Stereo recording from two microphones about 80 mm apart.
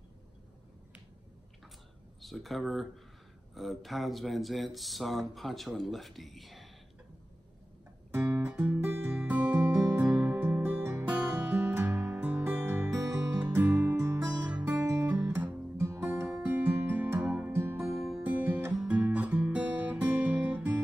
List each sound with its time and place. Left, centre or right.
2.2 s speech: centre
8.1 s music: right
10.0 s music: centre; by 11.1 s right
11.1 s music: centre
14.9 s guitar: right
15.1 s music: centre
15.8 s music: right
17.9 s music: centre
18.2 s music: right
18.8 s guitar: centre